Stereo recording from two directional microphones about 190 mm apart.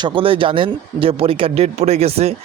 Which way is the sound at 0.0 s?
25° right (ahead or behind).